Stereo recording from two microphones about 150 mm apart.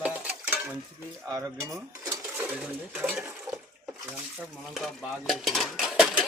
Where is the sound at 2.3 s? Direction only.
10° right (ahead or behind).